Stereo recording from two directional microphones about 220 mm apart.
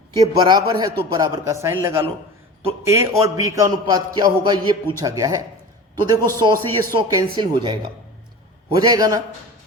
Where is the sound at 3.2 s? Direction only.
15° right (ahead or behind).